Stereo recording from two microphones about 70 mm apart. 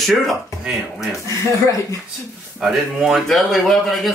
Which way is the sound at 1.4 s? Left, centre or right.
Left.